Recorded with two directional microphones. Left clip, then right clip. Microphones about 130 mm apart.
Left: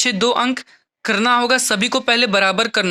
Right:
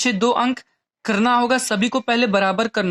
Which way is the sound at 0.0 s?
15° left (ahead or behind).